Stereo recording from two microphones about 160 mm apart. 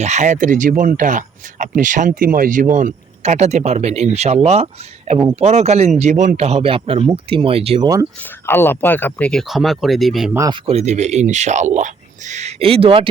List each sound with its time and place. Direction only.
0.0 s speech: 45° right (ahead or behind)
8.2 s speech: 15° left (ahead or behind); by 10.3 s centre (ahead or behind)
10.3 s speech: 20° right (ahead or behind)
10.7 s speech: 45° right (ahead or behind)